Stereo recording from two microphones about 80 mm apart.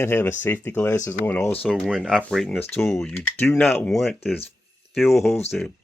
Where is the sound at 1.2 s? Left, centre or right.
Centre.